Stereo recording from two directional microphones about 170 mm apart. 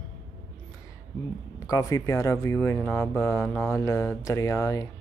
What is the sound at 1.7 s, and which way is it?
Speech, 20° left (ahead or behind).